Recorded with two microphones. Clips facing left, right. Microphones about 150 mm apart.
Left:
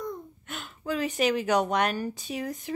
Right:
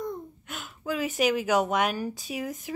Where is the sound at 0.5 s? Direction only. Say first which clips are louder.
Left 1 dB; centre (ahead or behind).